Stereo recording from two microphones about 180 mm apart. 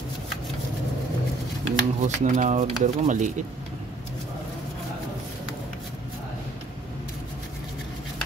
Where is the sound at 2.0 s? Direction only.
40° right (ahead or behind).